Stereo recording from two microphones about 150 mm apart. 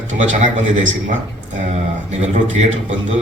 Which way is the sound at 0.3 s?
50° right (ahead or behind).